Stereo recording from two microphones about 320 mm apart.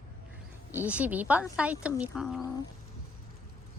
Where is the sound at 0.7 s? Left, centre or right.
Centre.